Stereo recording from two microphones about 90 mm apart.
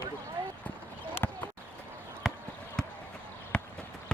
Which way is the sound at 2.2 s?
Centre (ahead or behind).